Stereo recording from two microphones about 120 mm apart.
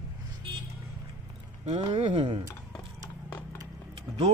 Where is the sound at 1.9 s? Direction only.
50° right (ahead or behind).